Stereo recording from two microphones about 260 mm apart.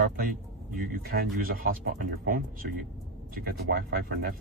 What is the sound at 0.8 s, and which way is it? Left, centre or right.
Speech, right.